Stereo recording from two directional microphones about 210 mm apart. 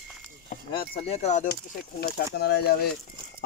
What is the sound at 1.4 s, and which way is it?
Speech, 50° left (ahead or behind).